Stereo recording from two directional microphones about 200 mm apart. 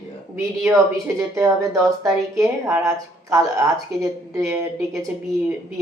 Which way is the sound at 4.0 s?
15° right (ahead or behind).